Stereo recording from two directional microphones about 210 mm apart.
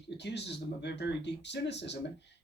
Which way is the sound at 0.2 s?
55° left (ahead or behind).